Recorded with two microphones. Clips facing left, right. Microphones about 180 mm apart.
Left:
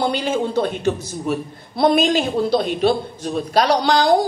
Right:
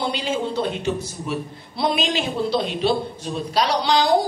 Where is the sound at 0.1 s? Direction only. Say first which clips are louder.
Left 4 dB; 50° left (ahead or behind).